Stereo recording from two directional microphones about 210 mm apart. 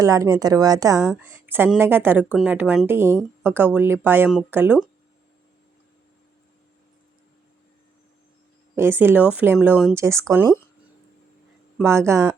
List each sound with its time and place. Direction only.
0.0 s speech: 15° right (ahead or behind)
8.7 s speech: 10° right (ahead or behind)
11.8 s speech: 15° right (ahead or behind)